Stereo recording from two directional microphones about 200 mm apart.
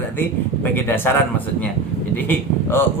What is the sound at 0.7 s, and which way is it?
A man's voice, 10° left (ahead or behind).